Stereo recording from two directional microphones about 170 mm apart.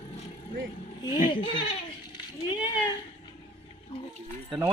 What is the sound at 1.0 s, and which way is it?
Speech, 25° left (ahead or behind).